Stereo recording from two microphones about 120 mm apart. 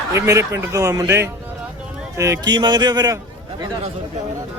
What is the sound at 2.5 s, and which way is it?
Speech, 35° right (ahead or behind).